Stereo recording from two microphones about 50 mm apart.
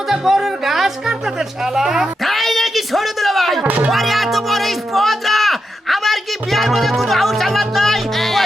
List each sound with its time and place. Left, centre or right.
0.1 s music: centre
1.7 s a sound: centre
3.7 s music: right
3.9 s music: centre